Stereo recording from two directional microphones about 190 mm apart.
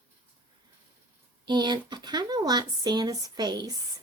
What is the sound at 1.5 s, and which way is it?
A woman's voice, 20° right (ahead or behind).